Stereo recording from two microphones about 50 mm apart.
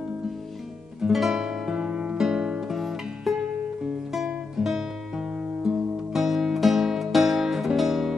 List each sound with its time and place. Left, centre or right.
1.0 s music: centre
1.9 s music: right
2.1 s music: centre
2.7 s music: centre
4.6 s music: centre